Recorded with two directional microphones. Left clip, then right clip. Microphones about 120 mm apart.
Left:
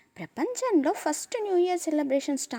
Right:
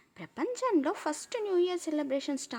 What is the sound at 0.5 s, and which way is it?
Speech, 30° left (ahead or behind).